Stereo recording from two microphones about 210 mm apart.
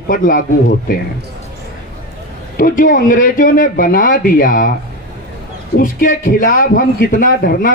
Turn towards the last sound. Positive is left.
turn(degrees=40)  # may be behind; listen again after turning